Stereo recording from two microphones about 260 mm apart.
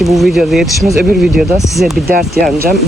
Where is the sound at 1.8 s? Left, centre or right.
Right.